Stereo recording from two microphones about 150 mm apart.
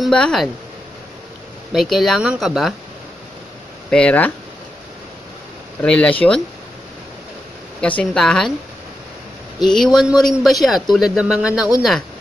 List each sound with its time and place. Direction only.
0.0 s speech: 5° left (ahead or behind)
1.7 s speech: centre (ahead or behind)
3.9 s speech: 10° left (ahead or behind)
5.8 s speech: 5° left (ahead or behind)
7.8 s speech: 5° left (ahead or behind)
9.6 s speech: 5° left (ahead or behind)